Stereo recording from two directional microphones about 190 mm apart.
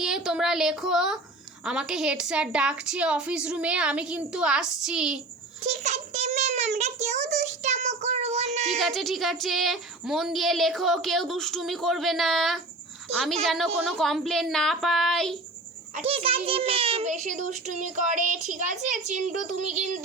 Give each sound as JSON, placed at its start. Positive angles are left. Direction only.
{"t": 0.0, "sound": "a woman's voice", "side_deg": 0}
{"t": 5.6, "sound": "a child's voice", "side_deg": -35}
{"t": 8.8, "sound": "speech", "side_deg": 0}
{"t": 16.0, "sound": "a child's voice", "side_deg": -30}